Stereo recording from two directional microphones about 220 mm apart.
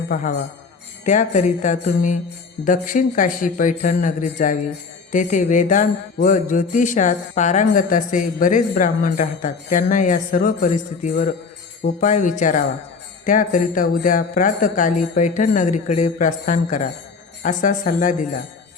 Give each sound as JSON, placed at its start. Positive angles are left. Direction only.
{"t": 0.1, "sound": "speech", "side_deg": 35}